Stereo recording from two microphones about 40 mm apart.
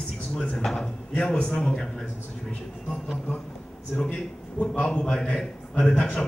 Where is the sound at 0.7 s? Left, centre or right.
Centre.